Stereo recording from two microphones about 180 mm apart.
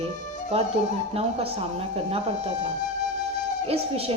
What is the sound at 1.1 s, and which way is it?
A woman's voice, 35° right (ahead or behind).